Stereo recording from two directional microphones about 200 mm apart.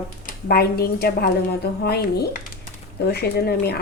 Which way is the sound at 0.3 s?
50° left (ahead or behind).